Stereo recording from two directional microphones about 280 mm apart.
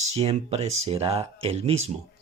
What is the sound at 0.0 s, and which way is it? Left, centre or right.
Speech, right.